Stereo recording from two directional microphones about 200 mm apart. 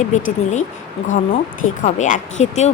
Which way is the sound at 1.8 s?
40° left (ahead or behind).